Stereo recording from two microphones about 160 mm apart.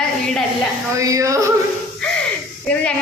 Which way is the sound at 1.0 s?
20° right (ahead or behind).